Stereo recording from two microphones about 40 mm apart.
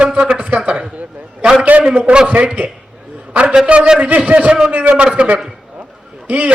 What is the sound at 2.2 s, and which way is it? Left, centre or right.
A man's voice, right.